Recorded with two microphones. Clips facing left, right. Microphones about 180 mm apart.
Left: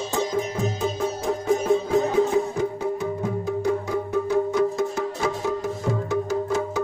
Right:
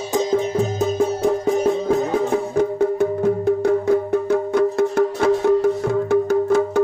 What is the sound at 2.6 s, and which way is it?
Music, 60° right (ahead or behind).